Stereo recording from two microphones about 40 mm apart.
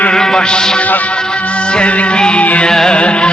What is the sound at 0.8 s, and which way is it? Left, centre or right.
Music, left.